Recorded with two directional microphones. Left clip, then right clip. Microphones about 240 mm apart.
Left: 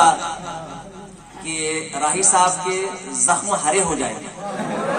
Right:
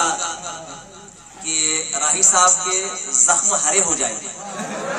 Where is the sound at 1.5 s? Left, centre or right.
Right.